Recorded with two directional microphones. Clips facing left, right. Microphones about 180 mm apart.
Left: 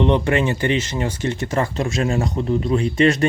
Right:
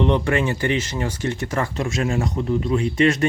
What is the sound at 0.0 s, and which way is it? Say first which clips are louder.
Speech: left 2 dB; 20° left (ahead or behind).